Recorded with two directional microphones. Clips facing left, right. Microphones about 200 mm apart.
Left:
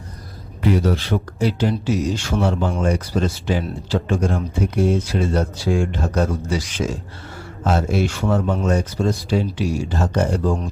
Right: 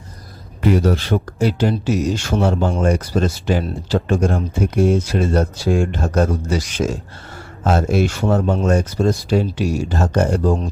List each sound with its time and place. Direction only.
0.7 s speech: 45° right (ahead or behind)